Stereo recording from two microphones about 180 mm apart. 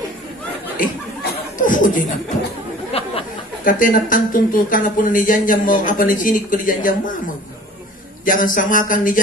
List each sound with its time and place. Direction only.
0.7 s chuckle: 50° left (ahead or behind)
2.9 s a sound: 35° left (ahead or behind)
3.6 s speech: 50° left (ahead or behind)
8.3 s speech: 50° left (ahead or behind)